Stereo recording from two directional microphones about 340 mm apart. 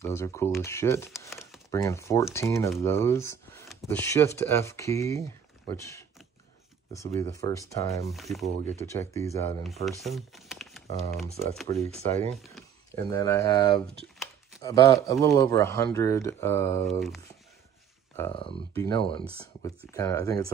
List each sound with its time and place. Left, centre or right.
0.0 s speech: centre
7.2 s speech: centre
9.8 s shuffling cards: centre
11.7 s speech: centre
12.4 s a sound: centre
13.1 s speech: centre